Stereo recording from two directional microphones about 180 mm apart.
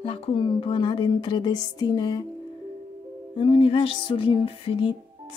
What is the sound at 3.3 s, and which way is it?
Music, 30° left (ahead or behind).